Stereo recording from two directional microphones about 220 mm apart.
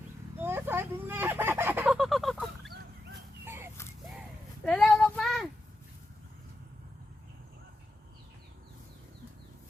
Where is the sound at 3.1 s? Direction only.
10° right (ahead or behind).